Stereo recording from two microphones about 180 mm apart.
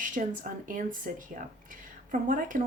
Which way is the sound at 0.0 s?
45° right (ahead or behind).